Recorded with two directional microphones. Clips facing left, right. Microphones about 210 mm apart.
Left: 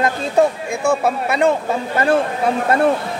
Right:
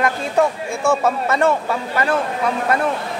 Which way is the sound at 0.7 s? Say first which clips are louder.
Left 1 dB; 15° left (ahead or behind).